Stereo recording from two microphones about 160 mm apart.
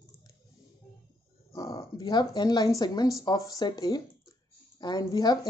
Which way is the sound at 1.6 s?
20° left (ahead or behind).